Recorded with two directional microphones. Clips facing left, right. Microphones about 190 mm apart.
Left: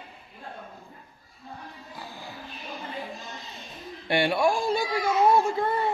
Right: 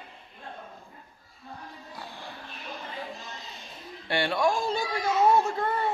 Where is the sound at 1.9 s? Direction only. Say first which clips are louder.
Left 1 dB; 5° left (ahead or behind).